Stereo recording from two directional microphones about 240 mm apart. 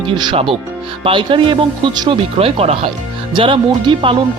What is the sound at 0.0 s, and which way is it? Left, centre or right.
Speech, centre.